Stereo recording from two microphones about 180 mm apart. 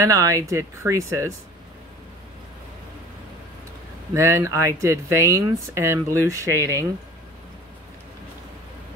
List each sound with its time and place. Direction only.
0.0 s speech: 15° right (ahead or behind)
4.1 s speech: 15° right (ahead or behind)